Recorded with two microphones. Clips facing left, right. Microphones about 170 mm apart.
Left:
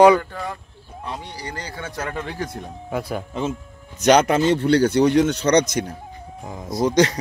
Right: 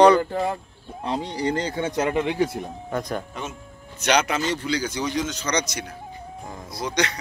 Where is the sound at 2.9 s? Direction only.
5° left (ahead or behind).